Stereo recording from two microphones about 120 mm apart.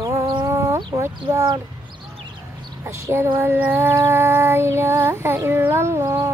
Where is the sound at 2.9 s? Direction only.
20° right (ahead or behind).